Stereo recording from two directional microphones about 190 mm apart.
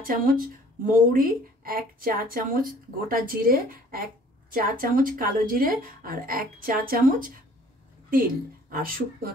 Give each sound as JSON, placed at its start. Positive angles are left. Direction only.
{"t": 0.0, "sound": "speech", "side_deg": -50}
{"t": 8.6, "sound": "speech", "side_deg": -50}